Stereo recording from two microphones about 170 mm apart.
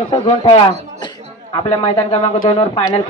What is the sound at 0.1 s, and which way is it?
Speech, 25° left (ahead or behind).